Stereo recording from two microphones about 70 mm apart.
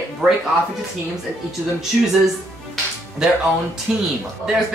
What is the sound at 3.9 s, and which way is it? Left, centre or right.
Speech, centre.